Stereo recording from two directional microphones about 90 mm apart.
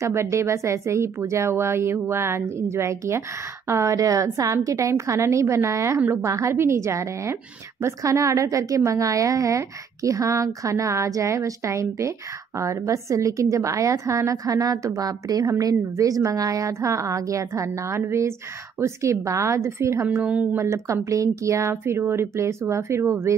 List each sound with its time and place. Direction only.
0.0 s a woman's voice: 30° right (ahead or behind)
20.1 s speech: 15° right (ahead or behind)
20.5 s a woman's voice: 30° right (ahead or behind)